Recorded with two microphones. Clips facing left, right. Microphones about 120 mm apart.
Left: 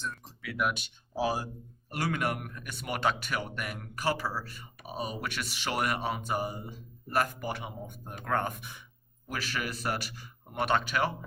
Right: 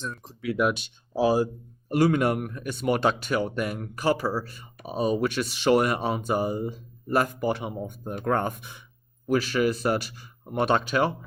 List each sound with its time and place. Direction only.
0.0 s speech: 30° right (ahead or behind)